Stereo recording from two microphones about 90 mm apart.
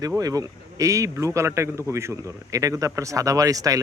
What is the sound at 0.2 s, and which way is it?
A man's voice, 40° right (ahead or behind).